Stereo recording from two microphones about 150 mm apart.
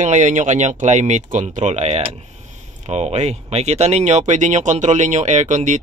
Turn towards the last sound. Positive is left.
turn(degrees=-55)  # may be behind; listen again after turning